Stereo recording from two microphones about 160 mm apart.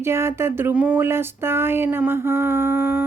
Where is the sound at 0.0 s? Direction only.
15° right (ahead or behind).